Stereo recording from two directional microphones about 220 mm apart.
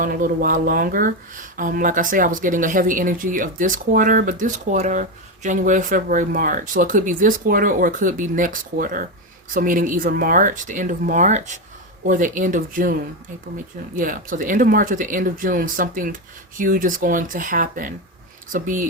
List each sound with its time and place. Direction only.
0.0 s speech: 40° right (ahead or behind)